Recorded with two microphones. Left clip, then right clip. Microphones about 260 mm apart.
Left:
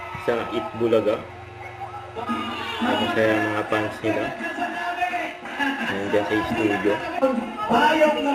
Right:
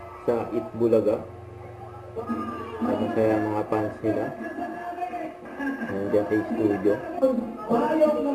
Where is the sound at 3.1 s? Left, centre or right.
Centre.